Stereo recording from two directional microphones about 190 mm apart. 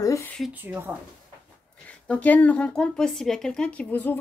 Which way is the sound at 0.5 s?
10° right (ahead or behind).